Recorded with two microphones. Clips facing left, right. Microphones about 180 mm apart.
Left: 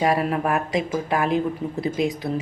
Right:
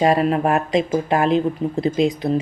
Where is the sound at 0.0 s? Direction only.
25° right (ahead or behind).